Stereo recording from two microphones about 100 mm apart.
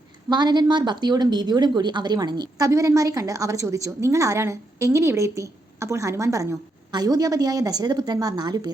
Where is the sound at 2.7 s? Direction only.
30° right (ahead or behind).